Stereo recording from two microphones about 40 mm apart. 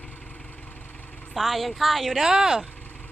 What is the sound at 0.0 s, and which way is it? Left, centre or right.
Vehicle, left.